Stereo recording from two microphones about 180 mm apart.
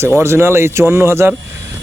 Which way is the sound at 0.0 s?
15° right (ahead or behind).